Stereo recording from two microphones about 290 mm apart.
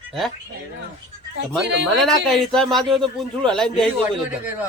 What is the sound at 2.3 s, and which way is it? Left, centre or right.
Speech, centre.